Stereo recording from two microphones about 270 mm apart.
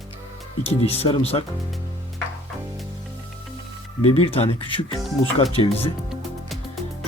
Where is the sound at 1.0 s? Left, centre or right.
Left.